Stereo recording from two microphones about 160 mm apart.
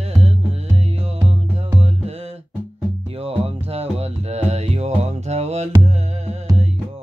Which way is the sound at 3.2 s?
40° right (ahead or behind).